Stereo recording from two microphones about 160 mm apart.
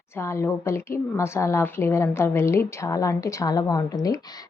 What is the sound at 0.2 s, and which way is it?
A woman's voice, 15° left (ahead or behind).